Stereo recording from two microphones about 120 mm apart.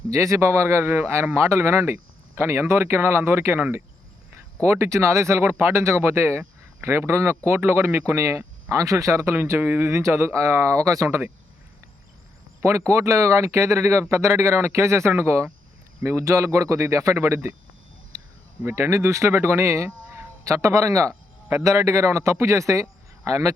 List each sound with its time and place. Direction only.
0.1 s speech: 25° right (ahead or behind)
12.6 s speech: 25° right (ahead or behind)
18.6 s speech: 20° right (ahead or behind)